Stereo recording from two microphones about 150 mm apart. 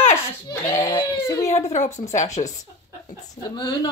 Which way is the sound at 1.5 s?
50° left (ahead or behind).